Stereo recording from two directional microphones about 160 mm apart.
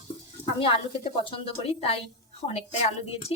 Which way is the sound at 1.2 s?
35° left (ahead or behind).